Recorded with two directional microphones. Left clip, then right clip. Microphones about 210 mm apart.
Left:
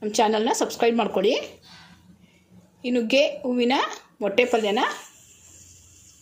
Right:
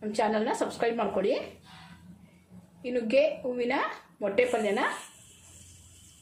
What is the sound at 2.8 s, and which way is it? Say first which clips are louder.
A woman's voice: left 4 dB; 45° left (ahead or behind).